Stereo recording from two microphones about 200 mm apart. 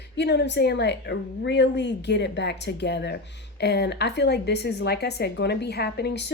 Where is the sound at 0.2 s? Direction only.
60° left (ahead or behind).